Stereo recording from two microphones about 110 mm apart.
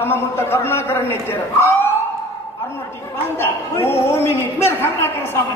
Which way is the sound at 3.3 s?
20° left (ahead or behind).